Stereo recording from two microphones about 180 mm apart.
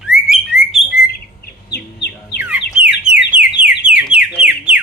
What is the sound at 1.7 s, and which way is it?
Chicken, 65° left (ahead or behind).